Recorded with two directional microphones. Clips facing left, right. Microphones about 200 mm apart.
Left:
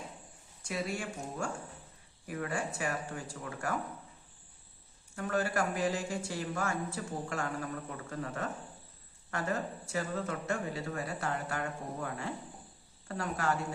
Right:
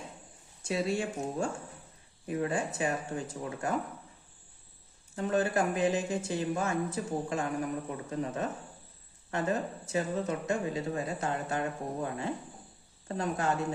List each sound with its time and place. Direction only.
0.6 s speech: 25° right (ahead or behind)
5.1 s speech: 20° right (ahead or behind)